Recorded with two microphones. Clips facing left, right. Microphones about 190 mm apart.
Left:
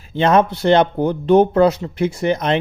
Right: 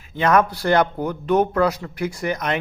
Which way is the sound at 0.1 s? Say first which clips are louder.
Left 3 dB; 25° left (ahead or behind).